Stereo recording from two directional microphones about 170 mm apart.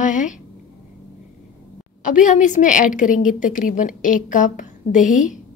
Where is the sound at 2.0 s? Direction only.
50° left (ahead or behind).